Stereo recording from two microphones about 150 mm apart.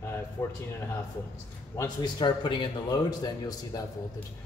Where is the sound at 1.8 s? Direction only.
30° left (ahead or behind).